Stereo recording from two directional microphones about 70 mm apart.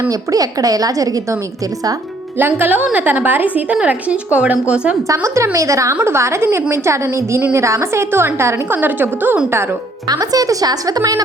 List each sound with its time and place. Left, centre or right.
0.1 s a woman's voice: right
2.4 s a woman's voice: right
5.0 s a woman's voice: right
8.7 s speech: right
10.1 s a woman's voice: right